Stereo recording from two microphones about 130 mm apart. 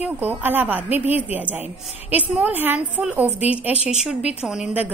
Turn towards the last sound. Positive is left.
turn(degrees=-5)  # may be behind; listen again after turning